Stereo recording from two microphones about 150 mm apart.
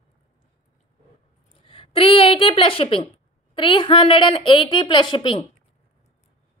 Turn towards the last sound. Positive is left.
turn(degrees=35)  # may be behind; listen again after turning